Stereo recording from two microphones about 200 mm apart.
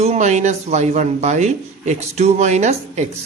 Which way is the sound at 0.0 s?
35° right (ahead or behind).